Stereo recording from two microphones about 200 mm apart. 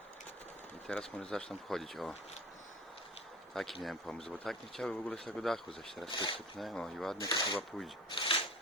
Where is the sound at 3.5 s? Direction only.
Centre (ahead or behind).